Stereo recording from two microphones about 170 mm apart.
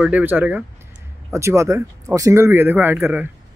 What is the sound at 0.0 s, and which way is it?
Speech, 10° right (ahead or behind).